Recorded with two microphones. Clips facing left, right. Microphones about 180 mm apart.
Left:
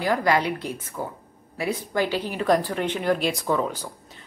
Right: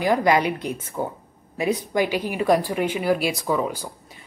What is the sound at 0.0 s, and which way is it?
Speech, 15° right (ahead or behind).